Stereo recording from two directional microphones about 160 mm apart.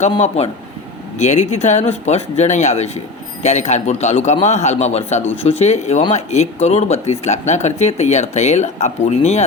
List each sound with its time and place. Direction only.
0.2 s speech: 40° left (ahead or behind)